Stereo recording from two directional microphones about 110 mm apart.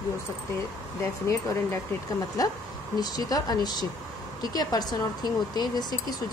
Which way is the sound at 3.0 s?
35° left (ahead or behind).